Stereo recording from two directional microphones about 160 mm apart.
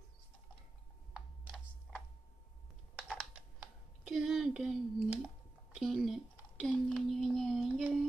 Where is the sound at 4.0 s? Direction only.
5° right (ahead or behind).